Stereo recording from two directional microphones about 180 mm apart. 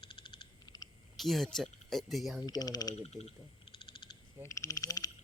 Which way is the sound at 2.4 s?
20° left (ahead or behind).